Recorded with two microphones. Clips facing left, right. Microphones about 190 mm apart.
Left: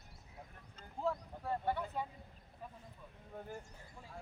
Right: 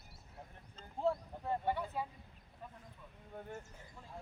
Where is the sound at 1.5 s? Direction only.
10° right (ahead or behind).